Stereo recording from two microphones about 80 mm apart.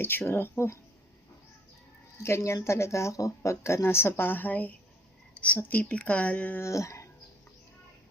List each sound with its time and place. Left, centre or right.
0.0 s speech: left
2.2 s speech: left; by 6.6 s centre
6.6 s speech: left